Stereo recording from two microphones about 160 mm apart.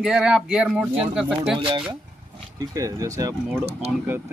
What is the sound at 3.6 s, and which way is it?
Speech, 40° right (ahead or behind).